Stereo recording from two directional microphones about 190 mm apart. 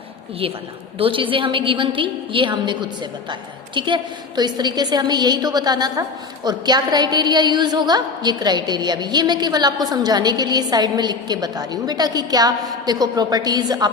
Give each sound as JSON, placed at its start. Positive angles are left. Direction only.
{"t": 0.9, "sound": "a woman's voice", "side_deg": -30}
{"t": 3.8, "sound": "a woman's voice", "side_deg": -25}